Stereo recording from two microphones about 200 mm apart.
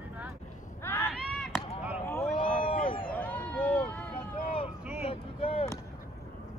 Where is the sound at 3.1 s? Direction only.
10° left (ahead or behind).